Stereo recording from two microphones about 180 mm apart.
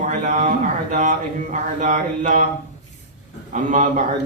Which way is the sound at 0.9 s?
45° right (ahead or behind).